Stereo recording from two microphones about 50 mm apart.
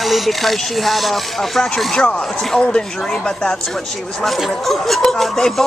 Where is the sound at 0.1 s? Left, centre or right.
Centre.